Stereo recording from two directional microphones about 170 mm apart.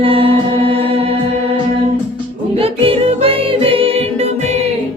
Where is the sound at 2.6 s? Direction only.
35° right (ahead or behind).